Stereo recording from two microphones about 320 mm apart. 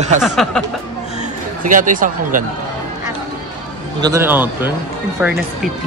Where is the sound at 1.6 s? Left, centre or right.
Right.